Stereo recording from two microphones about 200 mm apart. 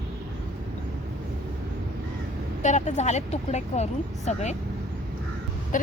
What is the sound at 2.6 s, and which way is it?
Speech, 35° left (ahead or behind).